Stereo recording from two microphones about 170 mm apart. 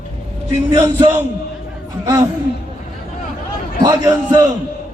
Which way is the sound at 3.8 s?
25° right (ahead or behind).